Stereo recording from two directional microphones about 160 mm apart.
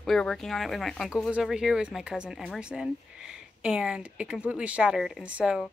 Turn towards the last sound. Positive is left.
turn(degrees=-5)  # may be behind; listen again after turning